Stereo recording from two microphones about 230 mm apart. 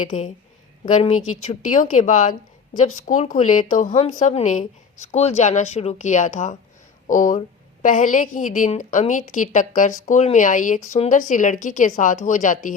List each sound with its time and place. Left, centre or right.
0.0 s a woman's voice: left